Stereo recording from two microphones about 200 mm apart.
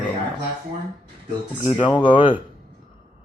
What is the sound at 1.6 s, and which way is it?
Speech, 25° left (ahead or behind).